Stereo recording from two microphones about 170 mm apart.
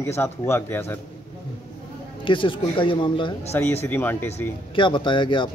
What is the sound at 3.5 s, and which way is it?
Speech, 15° left (ahead or behind).